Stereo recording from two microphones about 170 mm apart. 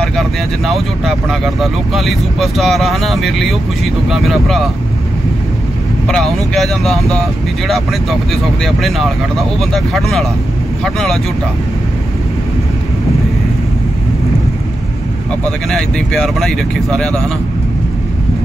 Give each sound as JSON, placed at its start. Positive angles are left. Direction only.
{"t": 0.0, "sound": "speech", "side_deg": 0}
{"t": 6.0, "sound": "speech", "side_deg": 0}
{"t": 15.7, "sound": "speech", "side_deg": 0}